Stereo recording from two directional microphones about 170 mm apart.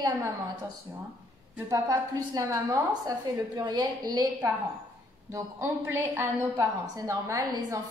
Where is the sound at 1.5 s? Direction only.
20° right (ahead or behind).